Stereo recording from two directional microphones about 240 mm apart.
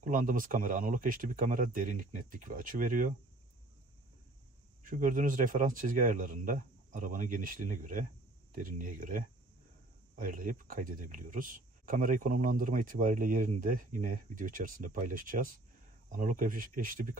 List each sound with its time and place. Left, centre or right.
0.0 s speech: right
4.8 s speech: right